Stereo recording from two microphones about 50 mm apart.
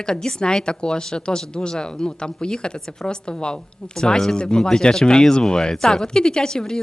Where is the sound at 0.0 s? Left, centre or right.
Centre.